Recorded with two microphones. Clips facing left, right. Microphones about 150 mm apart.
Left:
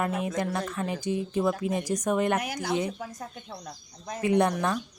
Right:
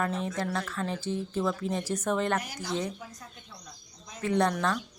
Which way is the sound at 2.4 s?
60° left (ahead or behind).